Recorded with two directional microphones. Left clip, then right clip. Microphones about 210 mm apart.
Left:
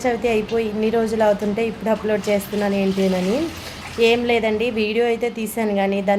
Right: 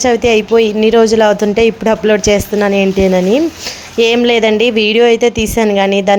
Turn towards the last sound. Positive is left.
turn(degrees=-40)  # may be behind; listen again after turning